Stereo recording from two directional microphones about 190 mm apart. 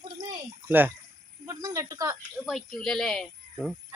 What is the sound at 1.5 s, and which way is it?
Cricket, 15° right (ahead or behind).